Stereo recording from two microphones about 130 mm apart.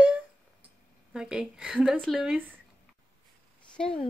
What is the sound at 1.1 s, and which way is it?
Speech, 5° right (ahead or behind).